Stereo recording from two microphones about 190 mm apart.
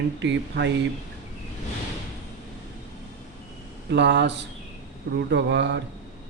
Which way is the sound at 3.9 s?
65° right (ahead or behind).